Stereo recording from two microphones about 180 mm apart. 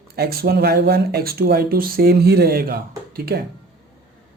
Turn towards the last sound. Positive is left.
turn(degrees=-55)  # may be behind; listen again after turning